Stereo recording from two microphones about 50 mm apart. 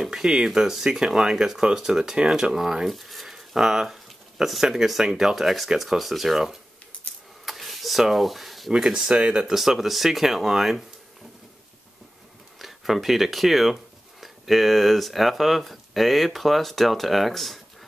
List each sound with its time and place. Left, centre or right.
0.0 s speech: centre
7.4 s a sound: centre
8.9 s speech: centre
9.5 s speech: centre
12.5 s speech: centre